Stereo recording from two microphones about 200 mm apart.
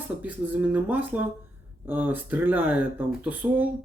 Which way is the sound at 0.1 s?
10° right (ahead or behind).